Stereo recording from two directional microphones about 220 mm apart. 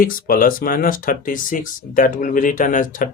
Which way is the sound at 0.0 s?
40° left (ahead or behind).